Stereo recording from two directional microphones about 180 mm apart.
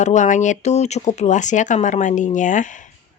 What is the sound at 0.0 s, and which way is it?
Speech, 40° left (ahead or behind).